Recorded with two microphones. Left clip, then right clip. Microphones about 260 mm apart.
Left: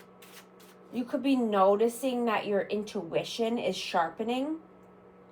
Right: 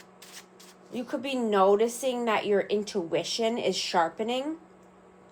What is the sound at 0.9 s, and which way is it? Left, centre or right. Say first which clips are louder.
A woman's voice: left 2 dB; right.